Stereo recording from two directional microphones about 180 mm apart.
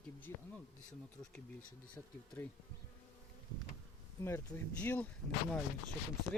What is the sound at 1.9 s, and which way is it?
Speech, 10° left (ahead or behind).